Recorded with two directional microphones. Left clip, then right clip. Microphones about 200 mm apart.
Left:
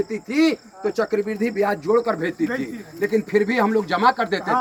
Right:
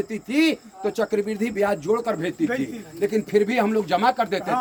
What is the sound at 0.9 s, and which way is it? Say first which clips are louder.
A man's voice: left 1 dB; 50° right (ahead or behind).